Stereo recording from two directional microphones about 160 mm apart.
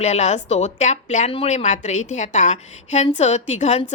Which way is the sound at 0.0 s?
45° left (ahead or behind).